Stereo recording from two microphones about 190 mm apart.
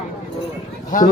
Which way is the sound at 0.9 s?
45° left (ahead or behind).